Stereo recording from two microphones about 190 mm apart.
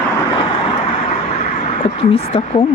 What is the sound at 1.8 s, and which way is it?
Speech, 30° left (ahead or behind).